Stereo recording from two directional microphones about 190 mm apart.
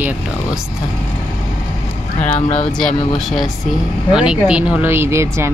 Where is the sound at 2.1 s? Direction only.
40° left (ahead or behind).